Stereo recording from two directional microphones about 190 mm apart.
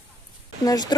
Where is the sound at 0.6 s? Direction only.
20° left (ahead or behind).